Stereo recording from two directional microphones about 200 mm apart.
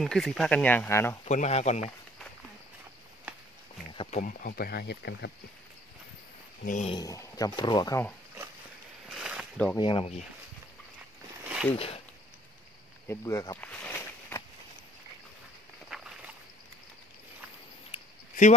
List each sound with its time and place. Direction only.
0.0 s speech: centre (ahead or behind)
1.2 s speech: 35° left (ahead or behind)
3.9 s a sound: 25° left (ahead or behind)
4.2 s speech: 45° left (ahead or behind)
6.6 s speech: 40° left (ahead or behind)
6.9 s speech: 15° left (ahead or behind)
9.1 s a sound: 5° right (ahead or behind)
9.8 s speech: 25° left (ahead or behind)
11.7 s speech: 30° left (ahead or behind)
13.1 s a sound: 15° left (ahead or behind)
15.9 s walk: 5° right (ahead or behind)